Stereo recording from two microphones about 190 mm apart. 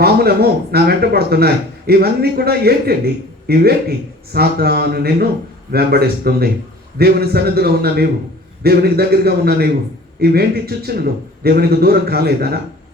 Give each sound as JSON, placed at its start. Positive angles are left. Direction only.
{"t": 0.0, "sound": "a man's voice", "side_deg": -55}